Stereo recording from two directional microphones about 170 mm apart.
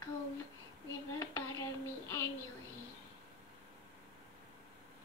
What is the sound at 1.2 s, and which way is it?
Child singing, 15° left (ahead or behind).